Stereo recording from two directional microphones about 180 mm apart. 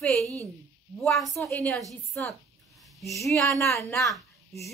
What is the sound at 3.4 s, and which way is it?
Speech, 15° left (ahead or behind).